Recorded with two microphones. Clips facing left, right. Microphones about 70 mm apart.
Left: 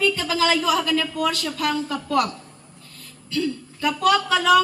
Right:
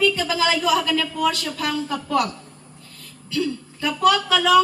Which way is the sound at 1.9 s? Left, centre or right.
Right.